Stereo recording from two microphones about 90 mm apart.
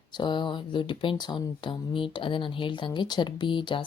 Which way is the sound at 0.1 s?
55° left (ahead or behind).